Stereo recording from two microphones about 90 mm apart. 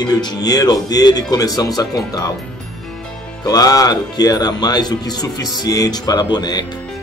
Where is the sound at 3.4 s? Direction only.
45° left (ahead or behind).